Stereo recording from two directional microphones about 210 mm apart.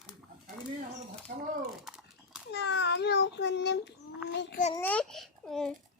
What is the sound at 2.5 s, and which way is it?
Babbling, 55° left (ahead or behind).